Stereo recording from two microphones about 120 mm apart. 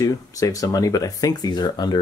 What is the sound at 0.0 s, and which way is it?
Speech, 30° left (ahead or behind).